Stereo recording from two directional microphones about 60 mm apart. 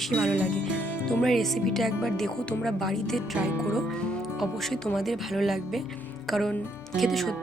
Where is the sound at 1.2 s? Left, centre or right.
Centre.